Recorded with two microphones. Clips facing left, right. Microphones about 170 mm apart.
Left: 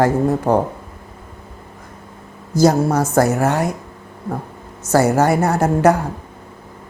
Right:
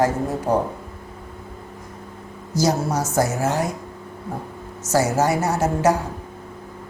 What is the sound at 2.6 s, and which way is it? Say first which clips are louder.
Speech: left 6 dB; 55° left (ahead or behind).